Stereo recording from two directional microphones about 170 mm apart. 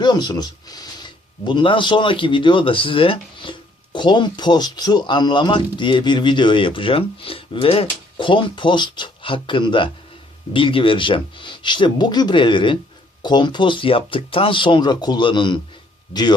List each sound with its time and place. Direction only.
0.0 s speech: 25° left (ahead or behind)